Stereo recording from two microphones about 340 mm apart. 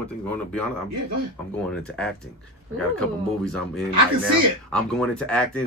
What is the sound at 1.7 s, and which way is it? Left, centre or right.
Speech, centre.